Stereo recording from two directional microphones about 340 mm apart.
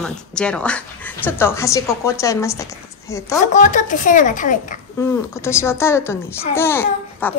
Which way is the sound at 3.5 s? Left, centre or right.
Left.